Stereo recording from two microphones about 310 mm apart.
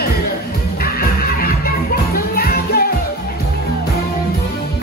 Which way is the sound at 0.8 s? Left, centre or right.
Left.